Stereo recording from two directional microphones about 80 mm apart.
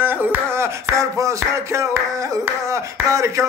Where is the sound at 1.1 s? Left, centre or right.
Right.